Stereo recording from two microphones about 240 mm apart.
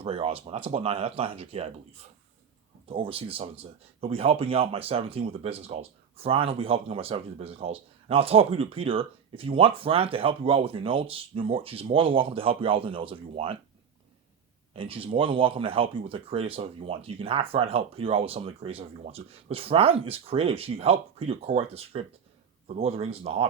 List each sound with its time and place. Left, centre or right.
0.0 s speech: right
14.7 s speech: right